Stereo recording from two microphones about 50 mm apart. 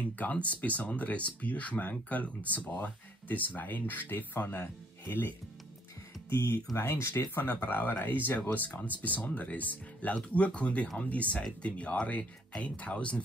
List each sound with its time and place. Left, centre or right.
0.2 s speech: left
6.3 s speech: left